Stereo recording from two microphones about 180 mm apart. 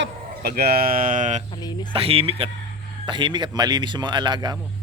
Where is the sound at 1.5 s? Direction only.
25° left (ahead or behind).